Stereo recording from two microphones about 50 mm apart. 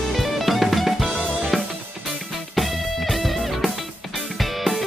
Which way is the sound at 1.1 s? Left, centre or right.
Centre.